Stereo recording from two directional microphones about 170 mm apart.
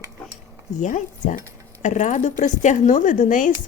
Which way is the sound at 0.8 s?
50° left (ahead or behind).